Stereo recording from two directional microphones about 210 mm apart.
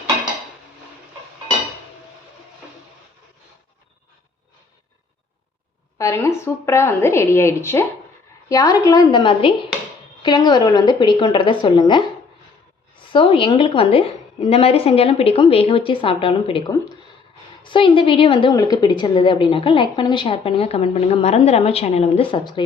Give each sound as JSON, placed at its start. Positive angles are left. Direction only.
{"t": 6.0, "sound": "a woman's voice", "side_deg": 15}
{"t": 13.1, "sound": "a woman's voice", "side_deg": 25}